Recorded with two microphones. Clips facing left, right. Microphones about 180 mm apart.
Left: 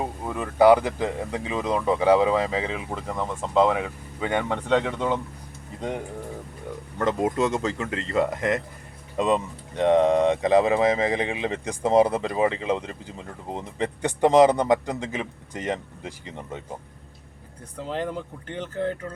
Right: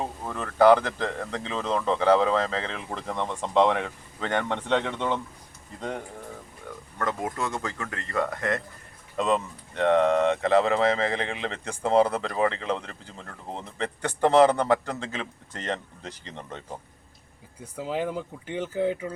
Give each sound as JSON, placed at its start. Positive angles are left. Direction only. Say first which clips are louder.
{"t": 0.0, "sound": "speech", "louder": "left 3 dB", "side_deg": 10}
{"t": 7.0, "sound": "speech", "louder": "left 7 dB", "side_deg": 25}
{"t": 17.7, "sound": "speech", "louder": "even", "side_deg": -5}